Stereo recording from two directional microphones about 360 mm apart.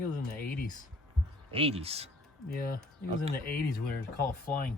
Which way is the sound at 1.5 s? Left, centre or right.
Centre.